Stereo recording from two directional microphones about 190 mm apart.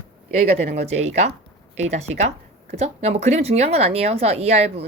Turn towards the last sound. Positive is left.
turn(degrees=-35)  # may be behind; listen again after turning